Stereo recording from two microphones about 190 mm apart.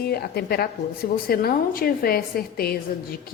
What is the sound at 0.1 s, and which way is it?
A woman's voice, 55° left (ahead or behind).